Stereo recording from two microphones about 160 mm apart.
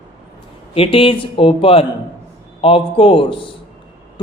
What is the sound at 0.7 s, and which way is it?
A man's voice, 35° left (ahead or behind).